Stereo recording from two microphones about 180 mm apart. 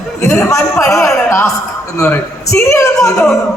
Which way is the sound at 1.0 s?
5° left (ahead or behind).